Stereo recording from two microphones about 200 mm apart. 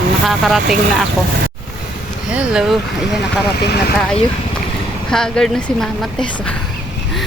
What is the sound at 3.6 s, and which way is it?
Speech, 55° left (ahead or behind).